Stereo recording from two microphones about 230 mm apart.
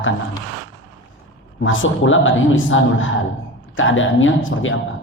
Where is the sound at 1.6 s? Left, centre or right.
Left.